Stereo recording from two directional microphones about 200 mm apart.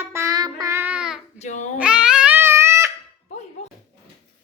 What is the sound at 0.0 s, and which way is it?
Babbling, 15° right (ahead or behind).